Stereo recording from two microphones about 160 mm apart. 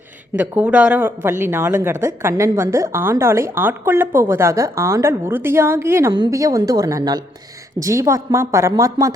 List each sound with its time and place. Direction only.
0.3 s a woman's voice: 10° right (ahead or behind)